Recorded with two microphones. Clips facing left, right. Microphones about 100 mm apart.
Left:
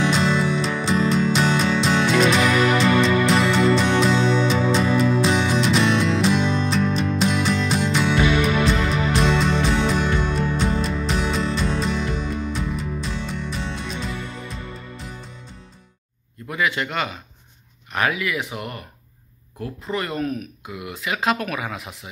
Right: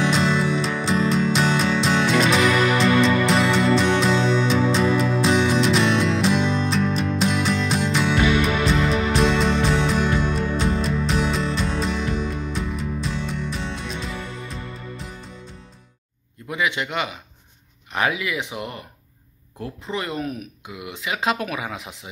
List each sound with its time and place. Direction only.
0.0 s music: centre (ahead or behind)
16.4 s a sound: 20° right (ahead or behind)
17.9 s speech: 20° right (ahead or behind)